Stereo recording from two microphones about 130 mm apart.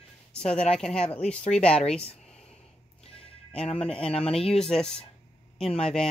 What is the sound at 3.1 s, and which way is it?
Music, 50° left (ahead or behind).